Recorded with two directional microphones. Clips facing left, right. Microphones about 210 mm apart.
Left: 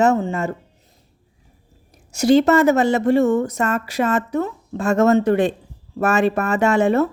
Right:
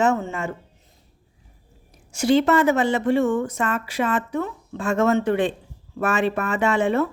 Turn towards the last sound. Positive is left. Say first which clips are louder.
# left 4 dB
turn(degrees=40)  # may be behind; listen again after turning